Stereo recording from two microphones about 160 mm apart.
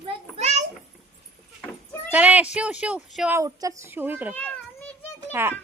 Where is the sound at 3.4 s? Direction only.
20° right (ahead or behind).